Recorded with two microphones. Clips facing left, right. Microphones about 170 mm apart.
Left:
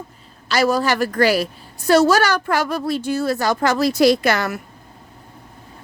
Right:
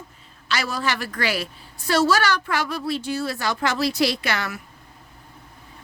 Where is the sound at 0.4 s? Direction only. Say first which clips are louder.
Left 8 dB; 40° left (ahead or behind).